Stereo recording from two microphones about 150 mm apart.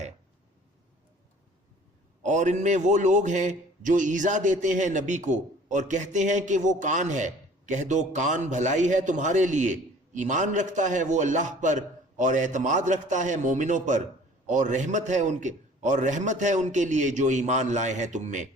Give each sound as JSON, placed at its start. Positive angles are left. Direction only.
{"t": 2.2, "sound": "a man's voice", "side_deg": -55}